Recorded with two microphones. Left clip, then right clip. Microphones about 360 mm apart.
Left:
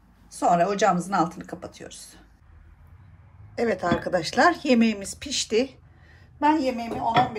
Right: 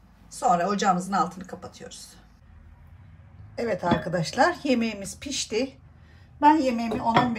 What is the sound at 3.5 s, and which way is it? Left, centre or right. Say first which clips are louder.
Speech: left 1 dB; left.